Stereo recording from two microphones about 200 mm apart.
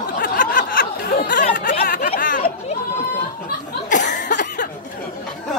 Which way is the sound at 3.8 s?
40° left (ahead or behind).